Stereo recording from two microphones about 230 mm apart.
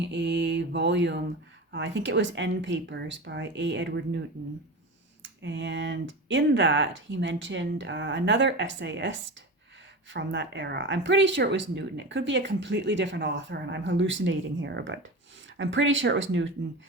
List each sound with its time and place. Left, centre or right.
0.0 s speech: right
5.2 s speech: right